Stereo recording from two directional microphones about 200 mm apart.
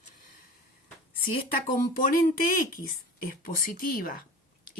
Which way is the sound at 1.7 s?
45° left (ahead or behind).